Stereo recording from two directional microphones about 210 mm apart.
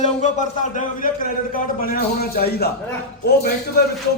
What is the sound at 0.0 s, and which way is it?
A man's voice, 35° left (ahead or behind).